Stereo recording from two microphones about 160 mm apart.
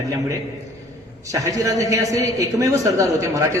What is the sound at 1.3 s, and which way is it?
A man's voice, 20° right (ahead or behind).